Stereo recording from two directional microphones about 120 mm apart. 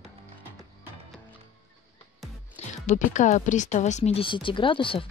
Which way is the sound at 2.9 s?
85° left.